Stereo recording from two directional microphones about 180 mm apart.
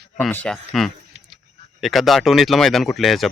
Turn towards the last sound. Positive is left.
turn(degrees=0)  # may be behind; listen again after turning